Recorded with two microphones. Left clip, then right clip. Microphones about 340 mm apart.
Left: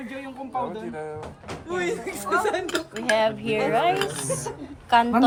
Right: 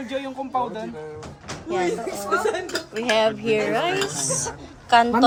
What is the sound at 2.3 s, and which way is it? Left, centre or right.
Speech, left.